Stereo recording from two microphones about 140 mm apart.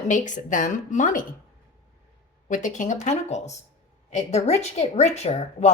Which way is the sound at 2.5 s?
65° left (ahead or behind).